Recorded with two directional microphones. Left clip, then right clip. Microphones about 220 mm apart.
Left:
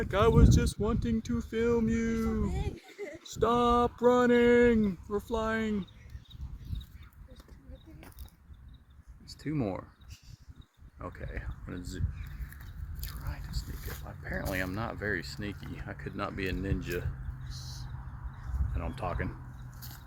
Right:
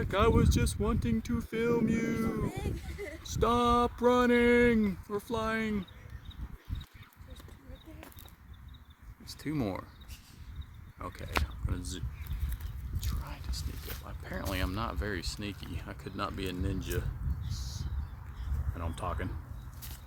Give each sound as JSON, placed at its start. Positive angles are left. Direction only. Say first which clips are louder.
{"t": 0.0, "sound": "speech", "louder": "left 2 dB", "side_deg": -5}
{"t": 9.5, "sound": "speech", "louder": "left 1 dB", "side_deg": -25}
{"t": 10.9, "sound": "speech", "louder": "right 7 dB", "side_deg": -15}
{"t": 11.8, "sound": "speech", "louder": "right 2 dB", "side_deg": -25}
{"t": 14.3, "sound": "speech", "louder": "left 2 dB", "side_deg": -15}
{"t": 17.5, "sound": "a sound", "louder": "even", "side_deg": -20}
{"t": 18.7, "sound": "speech", "louder": "left 1 dB", "side_deg": -10}